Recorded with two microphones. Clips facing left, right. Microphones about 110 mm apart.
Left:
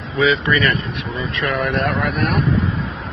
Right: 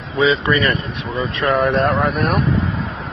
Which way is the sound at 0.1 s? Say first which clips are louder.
Right 1 dB; 30° right (ahead or behind).